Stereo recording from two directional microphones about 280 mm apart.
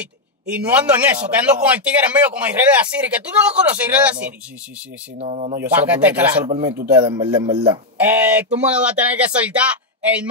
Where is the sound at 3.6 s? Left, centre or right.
Centre.